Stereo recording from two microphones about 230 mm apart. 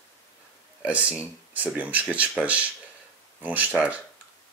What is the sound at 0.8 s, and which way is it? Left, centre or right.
Speech, centre.